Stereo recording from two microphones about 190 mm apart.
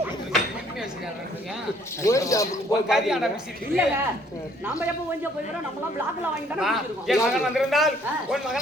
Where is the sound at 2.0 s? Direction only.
15° left (ahead or behind).